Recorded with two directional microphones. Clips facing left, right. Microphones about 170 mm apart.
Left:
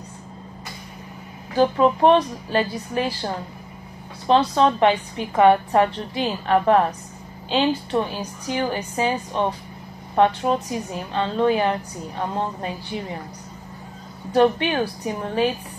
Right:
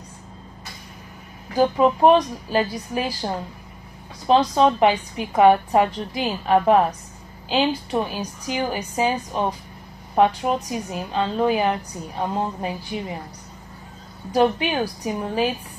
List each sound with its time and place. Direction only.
1.5 s a woman's voice: 10° right (ahead or behind)
14.3 s a woman's voice: 15° right (ahead or behind)